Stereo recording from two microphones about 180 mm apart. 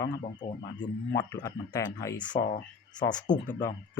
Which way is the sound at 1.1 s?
15° left (ahead or behind).